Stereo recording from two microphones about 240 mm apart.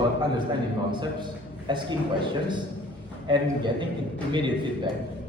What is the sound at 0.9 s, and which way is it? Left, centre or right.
A man's voice, centre.